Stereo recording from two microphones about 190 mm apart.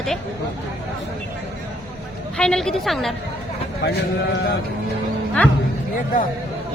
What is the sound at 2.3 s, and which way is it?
Speech, 5° left (ahead or behind).